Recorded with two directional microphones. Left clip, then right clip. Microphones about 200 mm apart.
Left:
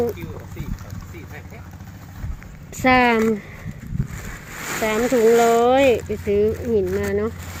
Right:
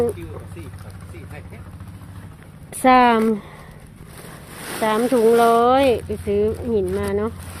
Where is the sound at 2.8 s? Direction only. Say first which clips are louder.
Right 2 dB; 5° right (ahead or behind).